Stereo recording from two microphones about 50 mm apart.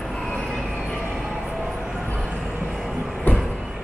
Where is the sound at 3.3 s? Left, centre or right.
Left.